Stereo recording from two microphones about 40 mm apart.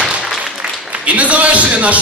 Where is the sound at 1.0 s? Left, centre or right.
Right.